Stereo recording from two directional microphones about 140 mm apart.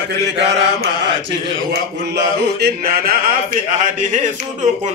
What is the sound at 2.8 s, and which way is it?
Speech, 90° right.